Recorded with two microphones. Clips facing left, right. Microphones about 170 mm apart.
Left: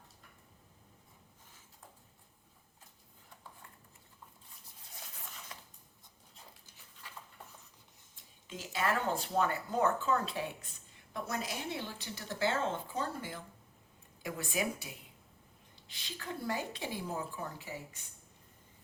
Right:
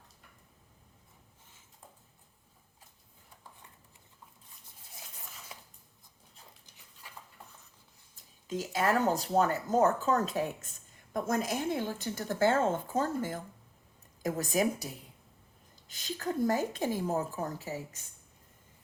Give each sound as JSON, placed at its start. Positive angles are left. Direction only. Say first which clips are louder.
{"t": 8.1, "sound": "a woman's voice", "louder": "right 11 dB", "side_deg": -40}